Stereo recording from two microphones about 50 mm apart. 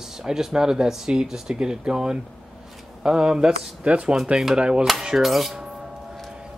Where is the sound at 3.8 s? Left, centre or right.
Right.